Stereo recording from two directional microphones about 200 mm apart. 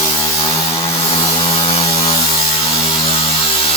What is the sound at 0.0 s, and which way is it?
Chainsaw, 30° left (ahead or behind).